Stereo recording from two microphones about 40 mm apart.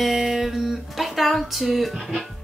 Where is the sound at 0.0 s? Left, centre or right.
Centre.